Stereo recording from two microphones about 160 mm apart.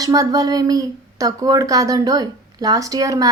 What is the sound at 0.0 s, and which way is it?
Speech, 20° right (ahead or behind).